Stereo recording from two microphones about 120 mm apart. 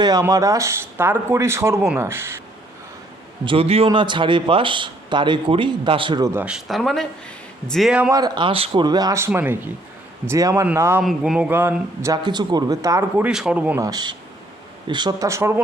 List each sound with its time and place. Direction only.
0.0 s speech: 30° right (ahead or behind)
3.4 s speech: 50° right (ahead or behind)
3.9 s speech: 40° right (ahead or behind)
6.3 s speech: 10° right (ahead or behind)
8.1 s speech: 35° right (ahead or behind)
9.2 s speech: 15° right (ahead or behind)
11.0 s speech: 5° right (ahead or behind)
12.0 s speech: 35° right (ahead or behind)
13.1 s speech: 10° right (ahead or behind)
13.7 s speech: 30° right (ahead or behind)
15.3 s speech: 20° right (ahead or behind)